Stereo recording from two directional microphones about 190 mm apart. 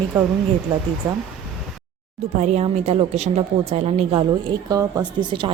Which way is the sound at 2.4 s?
35° right (ahead or behind).